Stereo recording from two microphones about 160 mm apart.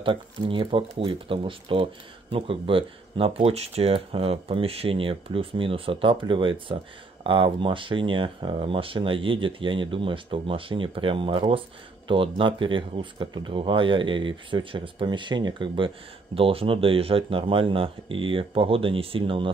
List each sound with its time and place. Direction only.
0.0 s speech: 35° right (ahead or behind)